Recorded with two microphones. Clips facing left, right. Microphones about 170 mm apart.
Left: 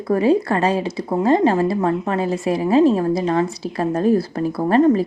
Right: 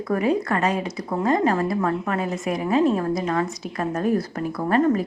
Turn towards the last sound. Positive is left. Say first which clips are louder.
# left 5 dB
turn(degrees=25)  # may be behind; listen again after turning